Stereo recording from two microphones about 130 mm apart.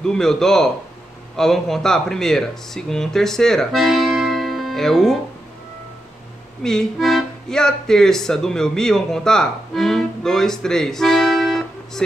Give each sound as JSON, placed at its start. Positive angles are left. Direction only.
{"t": 0.0, "sound": "speech", "side_deg": 5}
{"t": 6.6, "sound": "speech", "side_deg": 5}